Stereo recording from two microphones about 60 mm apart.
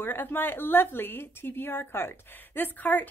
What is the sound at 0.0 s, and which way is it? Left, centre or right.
A woman's voice, left.